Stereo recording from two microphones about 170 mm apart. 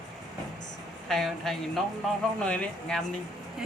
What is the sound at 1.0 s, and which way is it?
A woman's voice, centre (ahead or behind).